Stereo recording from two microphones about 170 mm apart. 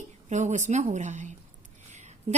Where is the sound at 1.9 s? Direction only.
45° right (ahead or behind).